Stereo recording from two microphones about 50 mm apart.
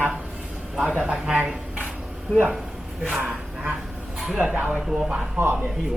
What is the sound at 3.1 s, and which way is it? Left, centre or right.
Bow-wow, right.